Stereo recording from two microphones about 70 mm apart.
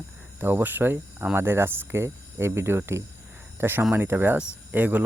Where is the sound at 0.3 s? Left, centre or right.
Right.